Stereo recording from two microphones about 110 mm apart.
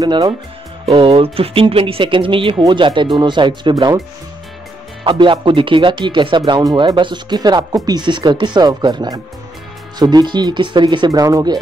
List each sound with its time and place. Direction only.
0.0 s speech: 40° right (ahead or behind)
0.8 s speech: 60° right (ahead or behind)
3.7 s speech: 35° right (ahead or behind)
5.0 s speech: 50° right (ahead or behind)
11.1 s speech: 30° right (ahead or behind)